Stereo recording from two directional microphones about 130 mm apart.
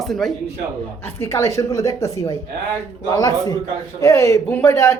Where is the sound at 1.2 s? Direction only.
20° left (ahead or behind).